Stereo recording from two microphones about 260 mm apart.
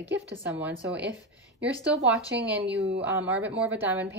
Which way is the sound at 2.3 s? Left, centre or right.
Right.